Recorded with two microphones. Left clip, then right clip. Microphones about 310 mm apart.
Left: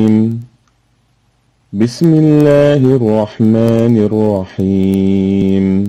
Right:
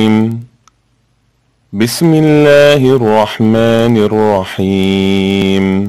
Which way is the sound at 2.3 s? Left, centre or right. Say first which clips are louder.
Right 4 dB; right.